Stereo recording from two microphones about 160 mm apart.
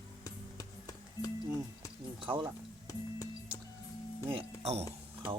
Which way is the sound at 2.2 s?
30° right (ahead or behind).